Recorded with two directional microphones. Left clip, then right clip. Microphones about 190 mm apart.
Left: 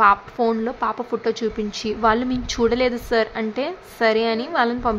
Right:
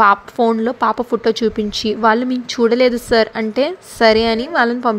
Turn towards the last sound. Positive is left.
turn(degrees=-25)  # may be behind; listen again after turning